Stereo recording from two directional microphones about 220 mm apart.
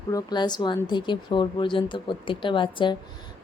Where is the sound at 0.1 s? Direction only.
15° left (ahead or behind).